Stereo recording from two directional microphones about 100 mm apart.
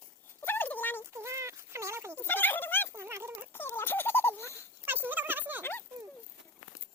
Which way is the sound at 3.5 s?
20° left (ahead or behind).